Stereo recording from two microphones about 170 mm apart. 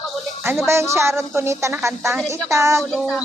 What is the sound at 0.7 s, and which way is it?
Speech, 15° right (ahead or behind).